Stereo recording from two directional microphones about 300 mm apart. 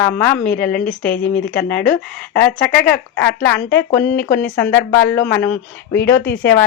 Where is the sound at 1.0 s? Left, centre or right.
Left.